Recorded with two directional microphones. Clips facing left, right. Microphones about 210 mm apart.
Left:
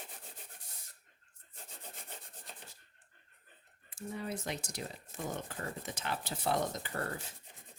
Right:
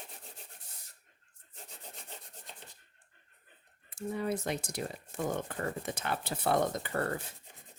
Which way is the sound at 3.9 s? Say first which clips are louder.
Right 6 dB; 55° right (ahead or behind).